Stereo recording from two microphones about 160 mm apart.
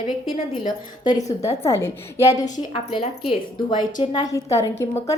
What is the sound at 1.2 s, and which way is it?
Speech, 45° left (ahead or behind).